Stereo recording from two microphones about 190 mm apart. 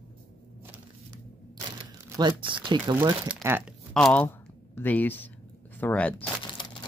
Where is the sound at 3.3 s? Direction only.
10° right (ahead or behind).